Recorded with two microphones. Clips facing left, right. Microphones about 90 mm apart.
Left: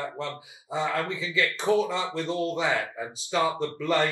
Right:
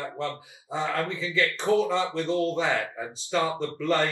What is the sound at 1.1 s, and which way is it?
Speech, 20° left (ahead or behind).